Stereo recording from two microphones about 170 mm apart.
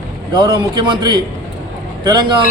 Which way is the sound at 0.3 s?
25° right (ahead or behind).